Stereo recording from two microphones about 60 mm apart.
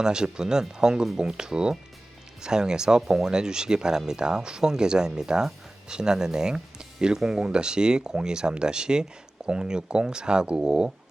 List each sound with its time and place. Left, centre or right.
0.0 s speech: centre